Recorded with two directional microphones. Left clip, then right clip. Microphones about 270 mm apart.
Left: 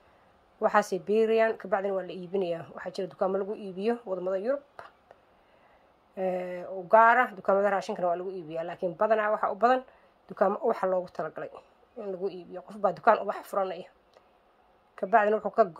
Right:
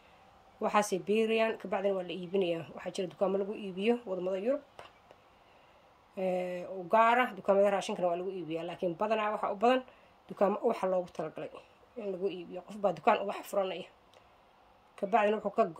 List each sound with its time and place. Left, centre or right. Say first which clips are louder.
0.6 s speech: left 5 dB; centre
6.1 s speech: left 2 dB; centre
15.0 s speech: left 5 dB; centre